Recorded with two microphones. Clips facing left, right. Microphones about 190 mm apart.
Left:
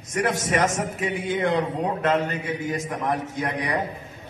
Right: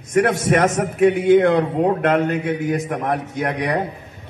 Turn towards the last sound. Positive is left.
turn(degrees=-60)  # may be behind; listen again after turning